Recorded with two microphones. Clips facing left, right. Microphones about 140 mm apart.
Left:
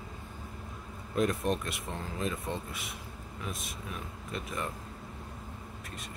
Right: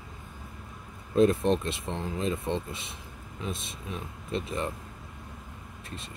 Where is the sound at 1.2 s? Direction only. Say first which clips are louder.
Right 7 dB; 25° right (ahead or behind).